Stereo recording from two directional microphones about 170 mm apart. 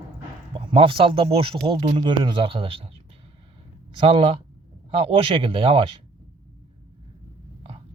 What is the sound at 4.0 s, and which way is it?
Speech, 35° right (ahead or behind).